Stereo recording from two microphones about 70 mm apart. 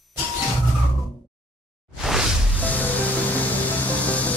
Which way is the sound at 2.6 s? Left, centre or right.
Left.